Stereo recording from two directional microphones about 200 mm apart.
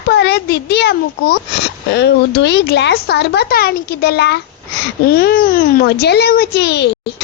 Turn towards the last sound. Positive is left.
turn(degrees=55)  # may be behind; listen again after turning